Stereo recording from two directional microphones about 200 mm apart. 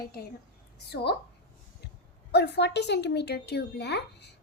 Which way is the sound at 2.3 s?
55° left (ahead or behind).